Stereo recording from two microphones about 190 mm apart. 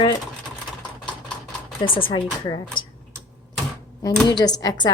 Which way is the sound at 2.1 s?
20° left (ahead or behind).